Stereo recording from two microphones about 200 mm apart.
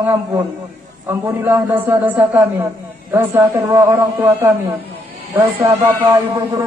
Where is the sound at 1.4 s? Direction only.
10° right (ahead or behind).